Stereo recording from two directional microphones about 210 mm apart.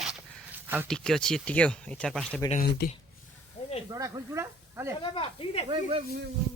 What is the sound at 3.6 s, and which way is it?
Snake, 35° left (ahead or behind).